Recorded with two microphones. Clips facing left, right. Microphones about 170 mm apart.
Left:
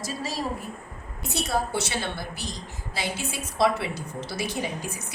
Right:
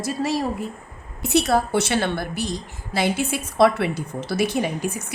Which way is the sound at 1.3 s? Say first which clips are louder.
Right 8 dB; 70° right (ahead or behind).